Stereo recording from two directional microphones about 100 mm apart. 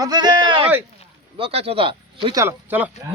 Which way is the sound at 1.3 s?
80° right.